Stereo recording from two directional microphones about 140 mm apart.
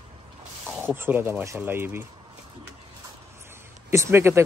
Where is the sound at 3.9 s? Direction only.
20° right (ahead or behind).